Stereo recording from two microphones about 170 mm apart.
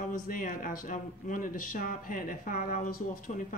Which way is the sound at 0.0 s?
55° left (ahead or behind).